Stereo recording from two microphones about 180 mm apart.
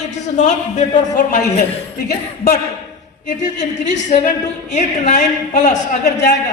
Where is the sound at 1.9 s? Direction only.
60° left (ahead or behind).